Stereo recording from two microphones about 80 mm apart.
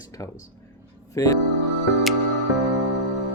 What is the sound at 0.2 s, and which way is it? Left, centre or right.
Speech, left.